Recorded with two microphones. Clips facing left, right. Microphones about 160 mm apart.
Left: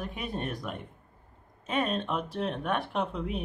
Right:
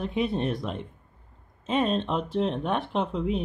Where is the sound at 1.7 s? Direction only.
30° right (ahead or behind).